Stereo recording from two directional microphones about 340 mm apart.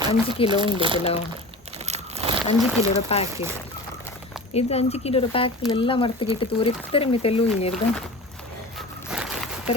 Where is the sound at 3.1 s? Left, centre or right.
Centre.